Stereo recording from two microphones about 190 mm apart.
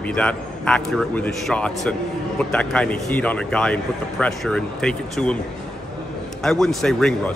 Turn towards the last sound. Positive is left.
turn(degrees=5)  # may be behind; listen again after turning